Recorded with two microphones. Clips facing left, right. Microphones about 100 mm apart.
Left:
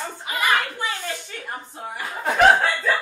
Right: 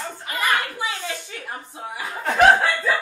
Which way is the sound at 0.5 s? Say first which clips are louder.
Left 1 dB; 10° right (ahead or behind).